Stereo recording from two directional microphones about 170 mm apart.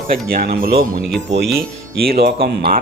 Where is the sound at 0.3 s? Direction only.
55° right (ahead or behind).